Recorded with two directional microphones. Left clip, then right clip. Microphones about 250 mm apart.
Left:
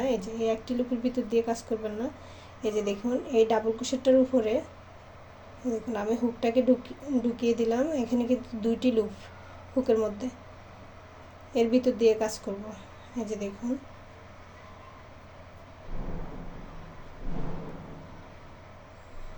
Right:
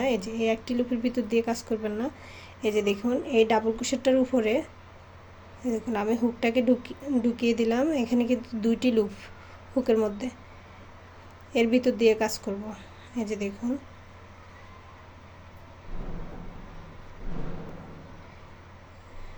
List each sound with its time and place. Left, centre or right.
0.0 s a woman's voice: right
5.6 s a woman's voice: right
11.5 s a woman's voice: right